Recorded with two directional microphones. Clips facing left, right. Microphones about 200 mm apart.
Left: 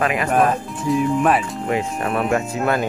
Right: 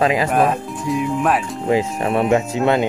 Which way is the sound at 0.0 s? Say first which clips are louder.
Right 4 dB; 25° right (ahead or behind).